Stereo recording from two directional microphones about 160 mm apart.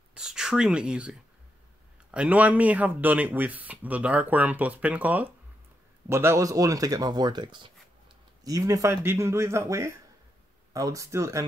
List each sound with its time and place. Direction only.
0.1 s speech: 5° right (ahead or behind)